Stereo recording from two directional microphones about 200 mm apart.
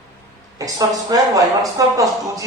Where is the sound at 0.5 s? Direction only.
15° right (ahead or behind).